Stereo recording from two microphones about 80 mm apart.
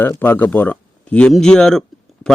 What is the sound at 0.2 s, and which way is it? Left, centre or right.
A man's voice, left.